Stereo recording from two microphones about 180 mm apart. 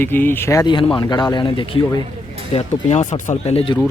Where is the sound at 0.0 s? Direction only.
10° left (ahead or behind); by 2.0 s 30° left (ahead or behind).